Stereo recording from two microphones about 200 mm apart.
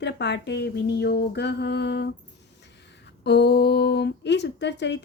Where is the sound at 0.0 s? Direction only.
60° left (ahead or behind).